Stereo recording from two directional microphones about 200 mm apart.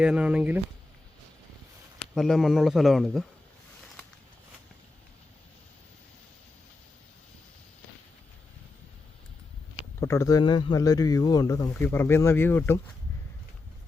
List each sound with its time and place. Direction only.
0.0 s a man's voice: 5° right (ahead or behind)
2.1 s a man's voice: centre (ahead or behind)
10.0 s speech: 15° left (ahead or behind)